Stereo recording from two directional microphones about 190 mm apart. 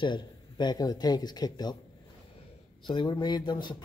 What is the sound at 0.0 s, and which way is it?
Speech, 25° left (ahead or behind).